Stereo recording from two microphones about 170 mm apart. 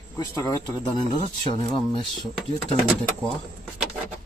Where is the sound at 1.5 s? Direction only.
25° left (ahead or behind).